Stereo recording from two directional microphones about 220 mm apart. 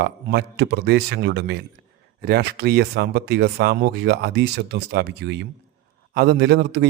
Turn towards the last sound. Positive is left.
turn(degrees=-50)  # may be behind; listen again after turning